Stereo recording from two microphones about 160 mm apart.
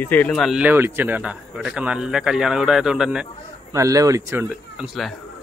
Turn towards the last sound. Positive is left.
turn(degrees=-5)  # may be behind; listen again after turning